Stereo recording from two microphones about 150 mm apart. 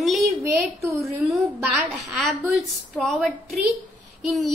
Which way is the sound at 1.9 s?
Centre (ahead or behind).